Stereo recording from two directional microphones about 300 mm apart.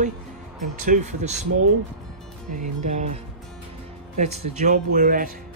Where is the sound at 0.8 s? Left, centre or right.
Right.